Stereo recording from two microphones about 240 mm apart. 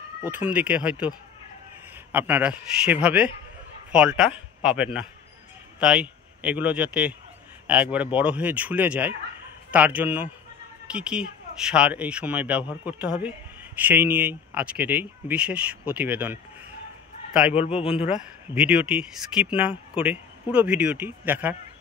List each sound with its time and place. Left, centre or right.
0.2 s speech: centre
2.1 s a man's voice: centre
17.6 s a man's voice: left
18.5 s speech: centre